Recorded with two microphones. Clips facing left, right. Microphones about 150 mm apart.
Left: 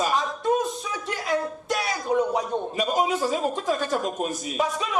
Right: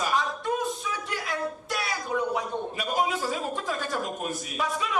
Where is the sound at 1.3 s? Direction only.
20° left (ahead or behind).